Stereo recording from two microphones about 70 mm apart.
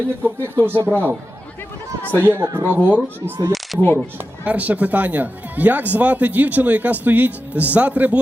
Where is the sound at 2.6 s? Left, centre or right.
Right.